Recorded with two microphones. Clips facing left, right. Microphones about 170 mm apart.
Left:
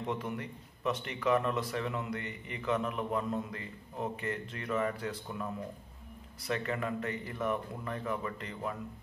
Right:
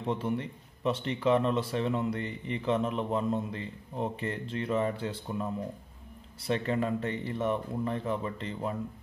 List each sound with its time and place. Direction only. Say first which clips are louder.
0.0 s speech: right 5 dB; 30° right (ahead or behind)